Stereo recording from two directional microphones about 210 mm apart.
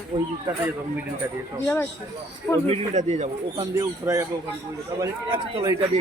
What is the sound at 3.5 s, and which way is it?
A man's voice, 15° right (ahead or behind).